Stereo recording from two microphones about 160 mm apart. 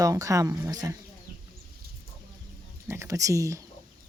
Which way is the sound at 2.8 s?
20° right (ahead or behind).